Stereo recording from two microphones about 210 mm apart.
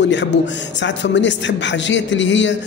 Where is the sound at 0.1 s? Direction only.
60° left (ahead or behind).